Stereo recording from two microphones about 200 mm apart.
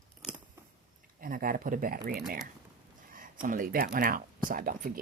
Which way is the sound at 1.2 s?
45° right (ahead or behind).